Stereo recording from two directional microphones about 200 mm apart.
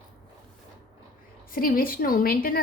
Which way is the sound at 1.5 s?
45° left (ahead or behind).